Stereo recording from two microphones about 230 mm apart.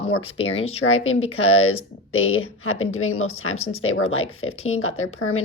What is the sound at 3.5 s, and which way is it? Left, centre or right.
Speech, left.